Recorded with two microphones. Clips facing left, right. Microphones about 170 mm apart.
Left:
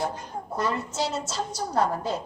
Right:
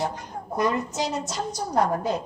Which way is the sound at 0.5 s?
15° right (ahead or behind).